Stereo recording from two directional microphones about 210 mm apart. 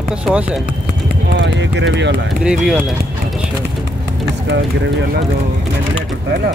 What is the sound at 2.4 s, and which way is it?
Speech, 5° right (ahead or behind).